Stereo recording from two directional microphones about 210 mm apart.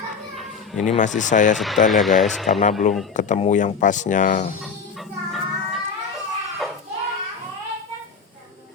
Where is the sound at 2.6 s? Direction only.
35° left (ahead or behind).